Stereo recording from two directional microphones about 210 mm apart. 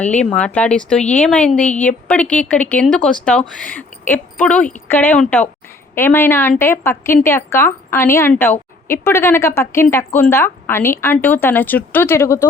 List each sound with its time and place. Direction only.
0.0 s a woman's voice: 5° left (ahead or behind)